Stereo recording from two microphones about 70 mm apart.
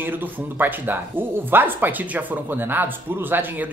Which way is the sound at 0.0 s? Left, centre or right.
Right.